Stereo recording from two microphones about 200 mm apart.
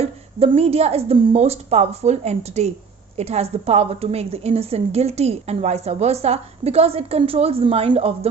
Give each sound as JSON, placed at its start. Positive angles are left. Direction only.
{"t": 0.0, "sound": "a woman's voice", "side_deg": -30}